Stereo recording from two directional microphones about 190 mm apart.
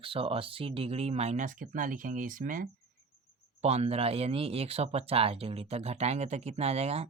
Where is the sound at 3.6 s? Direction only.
35° right (ahead or behind).